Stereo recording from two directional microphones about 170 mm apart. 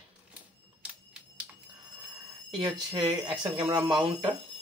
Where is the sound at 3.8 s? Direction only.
30° right (ahead or behind).